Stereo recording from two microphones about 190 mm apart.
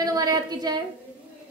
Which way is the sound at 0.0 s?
20° right (ahead or behind).